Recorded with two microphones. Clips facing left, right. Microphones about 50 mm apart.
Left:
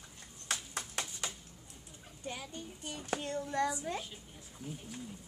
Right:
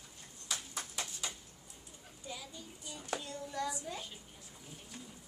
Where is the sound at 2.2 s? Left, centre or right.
Left.